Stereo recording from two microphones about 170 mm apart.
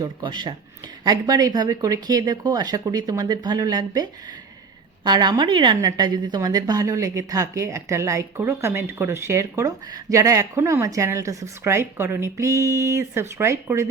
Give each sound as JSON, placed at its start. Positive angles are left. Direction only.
{"t": 0.0, "sound": "a woman's voice", "side_deg": -25}